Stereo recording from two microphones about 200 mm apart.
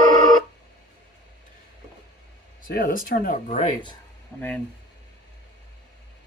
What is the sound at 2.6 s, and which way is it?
Speech, 45° left (ahead or behind).